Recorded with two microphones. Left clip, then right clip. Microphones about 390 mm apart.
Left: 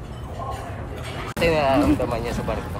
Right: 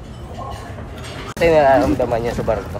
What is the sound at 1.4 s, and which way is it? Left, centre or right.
Speech, right.